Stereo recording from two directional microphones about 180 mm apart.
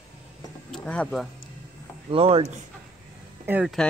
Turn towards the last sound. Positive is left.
turn(degrees=-10)  # may be behind; listen again after turning